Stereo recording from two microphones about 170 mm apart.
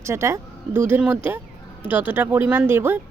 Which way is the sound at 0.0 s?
15° right (ahead or behind).